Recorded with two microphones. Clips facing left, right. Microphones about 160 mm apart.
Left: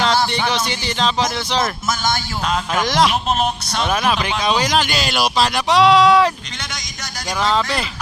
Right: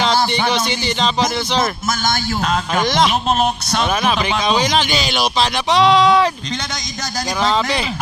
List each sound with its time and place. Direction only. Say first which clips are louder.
0.7 s speech: right 1 dB; centre (ahead or behind)
2.7 s speech: even; centre (ahead or behind)
3.4 s speech: right 3 dB; 50° right (ahead or behind)
4.0 s speech: right 1 dB; 5° left (ahead or behind)